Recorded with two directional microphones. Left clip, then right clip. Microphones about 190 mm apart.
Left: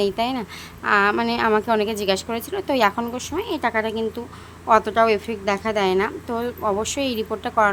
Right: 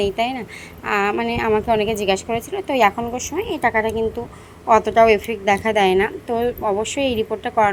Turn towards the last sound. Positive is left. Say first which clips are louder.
# right 2 dB
turn(degrees=5)  # may be behind; listen again after turning